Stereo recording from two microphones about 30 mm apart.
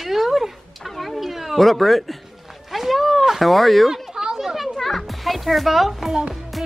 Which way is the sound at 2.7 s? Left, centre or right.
Centre.